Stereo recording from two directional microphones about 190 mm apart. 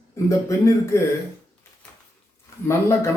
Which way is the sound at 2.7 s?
15° left (ahead or behind).